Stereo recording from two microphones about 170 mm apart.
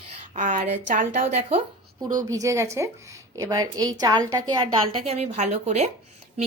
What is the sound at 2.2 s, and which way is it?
A woman's voice, 20° right (ahead or behind).